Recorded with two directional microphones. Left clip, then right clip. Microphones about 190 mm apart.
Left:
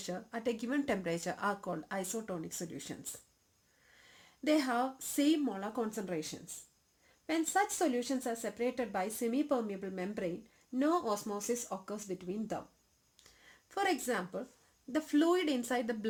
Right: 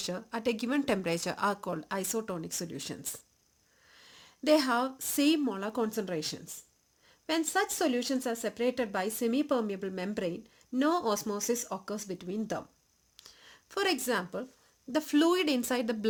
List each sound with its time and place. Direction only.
0.0 s a woman's voice: 50° right (ahead or behind)
13.2 s a sound: 55° right (ahead or behind)
14.9 s speech: 50° right (ahead or behind)